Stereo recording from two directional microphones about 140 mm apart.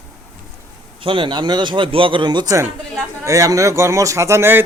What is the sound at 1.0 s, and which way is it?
Speech, 35° right (ahead or behind).